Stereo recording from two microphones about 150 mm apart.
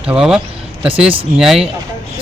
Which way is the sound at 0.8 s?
35° right (ahead or behind).